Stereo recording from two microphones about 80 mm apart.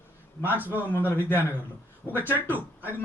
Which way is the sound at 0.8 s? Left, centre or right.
Left.